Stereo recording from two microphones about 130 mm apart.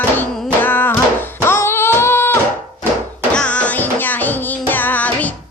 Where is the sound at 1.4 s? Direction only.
20° left (ahead or behind).